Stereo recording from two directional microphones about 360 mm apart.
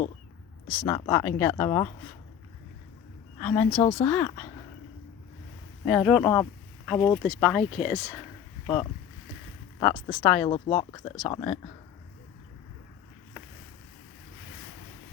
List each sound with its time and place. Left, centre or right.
0.9 s speech: centre
3.4 s speech: centre
3.8 s speech: centre
4.1 s speech: centre
5.8 s speech: centre
8.6 s speech: centre
10.4 s speech: centre